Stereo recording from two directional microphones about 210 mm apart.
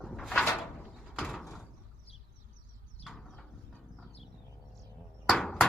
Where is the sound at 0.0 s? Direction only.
Centre (ahead or behind).